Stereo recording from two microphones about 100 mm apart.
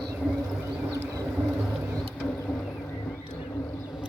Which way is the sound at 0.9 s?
35° right (ahead or behind).